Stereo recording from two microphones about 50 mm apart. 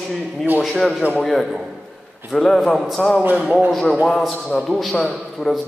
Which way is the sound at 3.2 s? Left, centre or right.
Right.